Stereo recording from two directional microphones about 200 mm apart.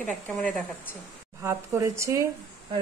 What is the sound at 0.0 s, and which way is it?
Speech, 5° left (ahead or behind).